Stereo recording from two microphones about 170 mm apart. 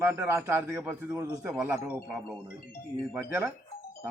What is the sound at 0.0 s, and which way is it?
A man's voice, 15° right (ahead or behind).